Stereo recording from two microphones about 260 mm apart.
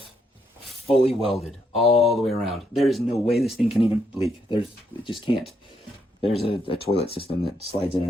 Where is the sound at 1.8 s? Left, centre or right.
Left.